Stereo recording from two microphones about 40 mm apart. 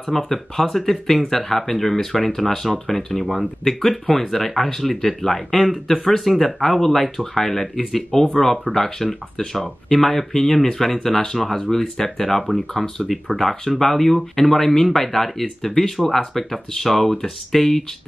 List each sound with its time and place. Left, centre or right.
0.0 s speech: centre
12.8 s speech: centre